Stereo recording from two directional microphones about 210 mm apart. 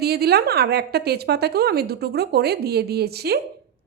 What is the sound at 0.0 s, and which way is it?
A woman's voice, 50° right (ahead or behind).